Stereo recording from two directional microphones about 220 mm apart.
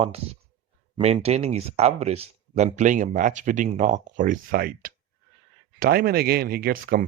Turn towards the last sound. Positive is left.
turn(degrees=-40)  # may be behind; listen again after turning